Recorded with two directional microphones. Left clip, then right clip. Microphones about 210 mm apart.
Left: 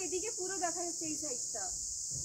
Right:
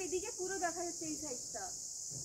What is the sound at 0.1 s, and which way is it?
Cricket, 35° left (ahead or behind).